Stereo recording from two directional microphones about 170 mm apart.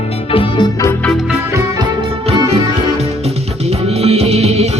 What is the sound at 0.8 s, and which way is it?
Music, 5° left (ahead or behind).